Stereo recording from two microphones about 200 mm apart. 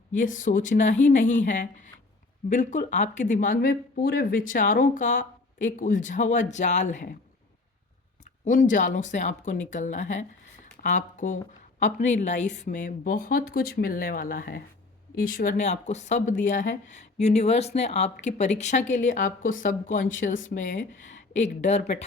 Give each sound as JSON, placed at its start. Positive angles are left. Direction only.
{"t": 0.1, "sound": "speech", "side_deg": 40}
{"t": 8.2, "sound": "speech", "side_deg": 40}